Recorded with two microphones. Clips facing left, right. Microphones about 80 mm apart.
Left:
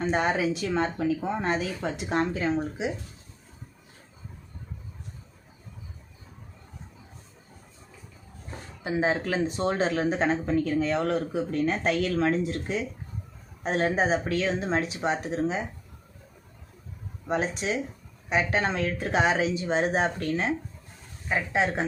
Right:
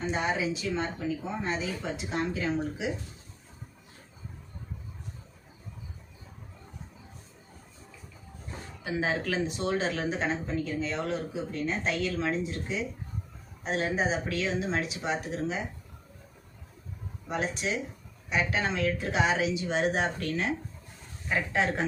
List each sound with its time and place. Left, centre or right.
0.0 s speech: left
2.3 s speech: left
8.8 s speech: left
13.6 s speech: left
17.2 s speech: left
21.2 s a woman's voice: centre